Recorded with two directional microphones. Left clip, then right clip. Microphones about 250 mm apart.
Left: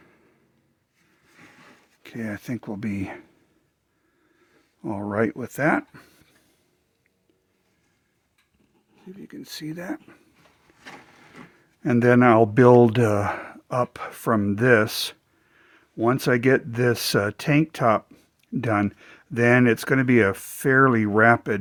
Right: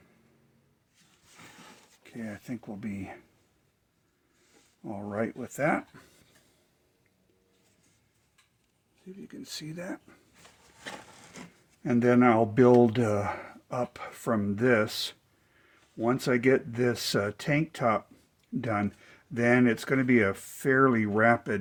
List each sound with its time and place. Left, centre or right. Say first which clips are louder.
2.0 s speech: left 8 dB; left
4.8 s speech: left 9 dB; left
9.0 s speech: left 4 dB; left
11.8 s speech: left 6 dB; left